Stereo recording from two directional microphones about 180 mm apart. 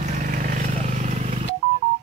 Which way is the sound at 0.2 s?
45° right (ahead or behind).